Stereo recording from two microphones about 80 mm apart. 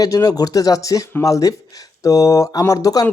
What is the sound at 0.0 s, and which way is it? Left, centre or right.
Speech, left.